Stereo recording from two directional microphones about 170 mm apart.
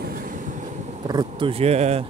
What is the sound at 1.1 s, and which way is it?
Speech, 25° right (ahead or behind).